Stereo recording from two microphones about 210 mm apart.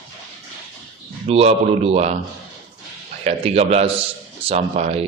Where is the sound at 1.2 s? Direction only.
30° right (ahead or behind).